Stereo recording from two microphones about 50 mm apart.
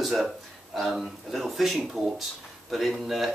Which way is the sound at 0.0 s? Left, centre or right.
Centre.